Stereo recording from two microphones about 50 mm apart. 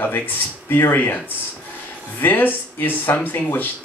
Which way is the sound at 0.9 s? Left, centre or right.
Left.